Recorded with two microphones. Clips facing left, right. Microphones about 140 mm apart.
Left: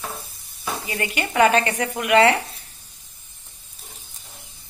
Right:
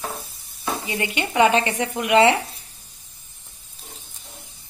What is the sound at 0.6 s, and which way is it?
Speech, 20° right (ahead or behind).